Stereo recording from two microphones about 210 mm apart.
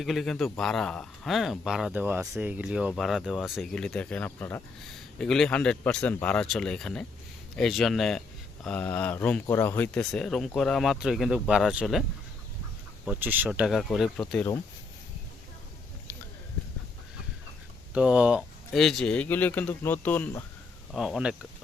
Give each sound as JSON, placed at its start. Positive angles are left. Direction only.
{"t": 0.0, "sound": "speech", "side_deg": 0}
{"t": 13.1, "sound": "speech", "side_deg": -10}
{"t": 17.9, "sound": "speech", "side_deg": -5}
{"t": 20.9, "sound": "speech", "side_deg": 0}